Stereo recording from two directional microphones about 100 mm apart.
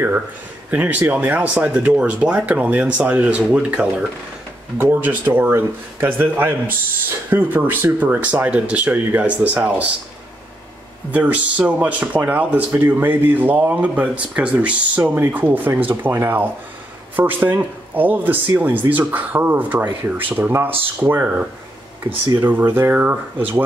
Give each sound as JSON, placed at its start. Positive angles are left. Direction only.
{"t": 0.7, "sound": "speech", "side_deg": -15}
{"t": 11.1, "sound": "speech", "side_deg": -15}
{"t": 22.5, "sound": "speech", "side_deg": -20}